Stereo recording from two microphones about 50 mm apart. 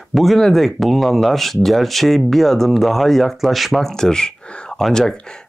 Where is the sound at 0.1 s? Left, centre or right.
Centre.